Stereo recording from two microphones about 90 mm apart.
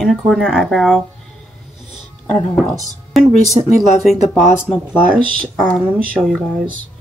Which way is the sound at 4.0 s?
Centre (ahead or behind).